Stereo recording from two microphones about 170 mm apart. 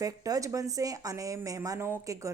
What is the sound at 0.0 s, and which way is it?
Speech, 20° right (ahead or behind).